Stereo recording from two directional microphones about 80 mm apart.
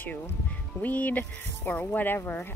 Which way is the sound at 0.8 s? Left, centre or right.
Centre.